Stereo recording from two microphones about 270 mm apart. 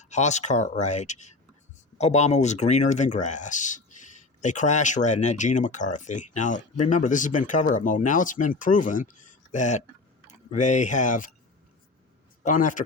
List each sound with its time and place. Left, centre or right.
0.0 s speech: left
12.4 s a man's voice: left